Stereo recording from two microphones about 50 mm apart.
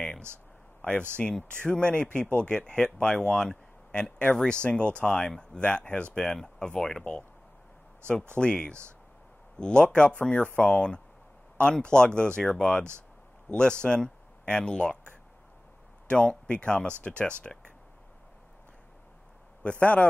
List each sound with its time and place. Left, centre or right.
1.2 s speech: left
8.4 s speech: centre
16.1 s speech: centre
19.6 s speech: left